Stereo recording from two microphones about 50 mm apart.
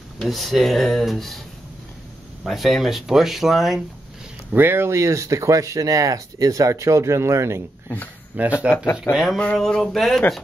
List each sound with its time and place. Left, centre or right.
0.2 s speech: centre
2.4 s speech: centre
4.5 s speech: right
8.4 s speech: right
9.1 s speech: left
9.6 s speech: centre